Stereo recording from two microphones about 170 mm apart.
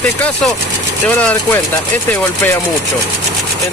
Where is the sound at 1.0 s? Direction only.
10° left (ahead or behind).